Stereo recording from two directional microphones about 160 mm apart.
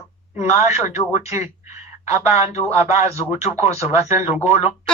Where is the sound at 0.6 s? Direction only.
15° right (ahead or behind).